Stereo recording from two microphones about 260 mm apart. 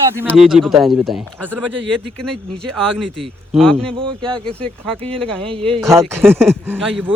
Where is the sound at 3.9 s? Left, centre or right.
Centre.